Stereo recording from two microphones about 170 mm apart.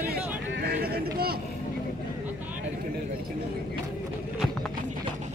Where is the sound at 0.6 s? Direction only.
65° right (ahead or behind).